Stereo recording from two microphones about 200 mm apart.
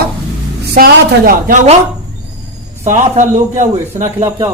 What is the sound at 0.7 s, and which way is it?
A woman's voice, 45° right (ahead or behind).